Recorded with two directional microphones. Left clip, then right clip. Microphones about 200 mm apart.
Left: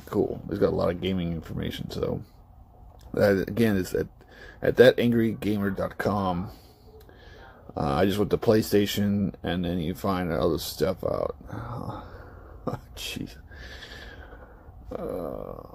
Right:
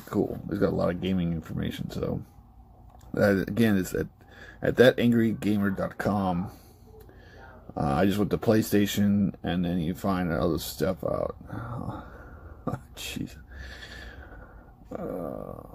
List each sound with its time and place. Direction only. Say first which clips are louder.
0.1 s speech: left 2 dB; 15° left (ahead or behind)
7.7 s speech: left 1 dB; 15° left (ahead or behind)
12.6 s a sound: left 2 dB; 15° left (ahead or behind)
14.9 s speech: left 2 dB; 15° left (ahead or behind)